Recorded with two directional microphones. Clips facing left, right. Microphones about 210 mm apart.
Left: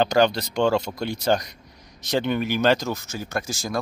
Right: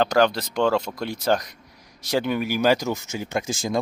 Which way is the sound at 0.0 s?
Centre (ahead or behind).